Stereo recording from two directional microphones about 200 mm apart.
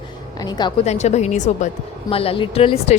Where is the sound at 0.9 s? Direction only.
35° left (ahead or behind).